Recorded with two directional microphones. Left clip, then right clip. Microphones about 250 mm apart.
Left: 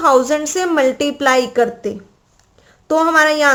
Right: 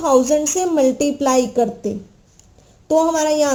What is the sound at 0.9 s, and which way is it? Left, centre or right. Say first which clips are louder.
Speech: left 2 dB; centre.